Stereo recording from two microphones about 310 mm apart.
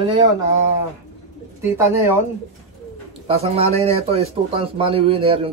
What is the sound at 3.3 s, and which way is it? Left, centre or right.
A man's voice, centre.